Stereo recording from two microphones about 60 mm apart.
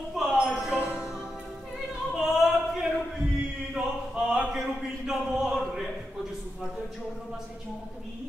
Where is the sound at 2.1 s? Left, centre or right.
Centre.